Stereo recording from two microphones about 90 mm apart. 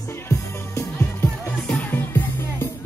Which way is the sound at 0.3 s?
30° left (ahead or behind).